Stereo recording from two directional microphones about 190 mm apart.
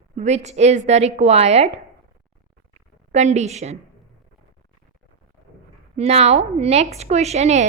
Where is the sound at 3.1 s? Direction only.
35° right (ahead or behind).